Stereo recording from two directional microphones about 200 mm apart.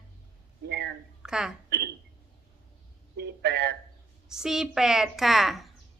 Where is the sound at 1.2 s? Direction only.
5° right (ahead or behind).